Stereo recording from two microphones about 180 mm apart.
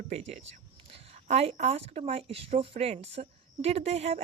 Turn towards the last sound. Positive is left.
turn(degrees=-35)  # may be behind; listen again after turning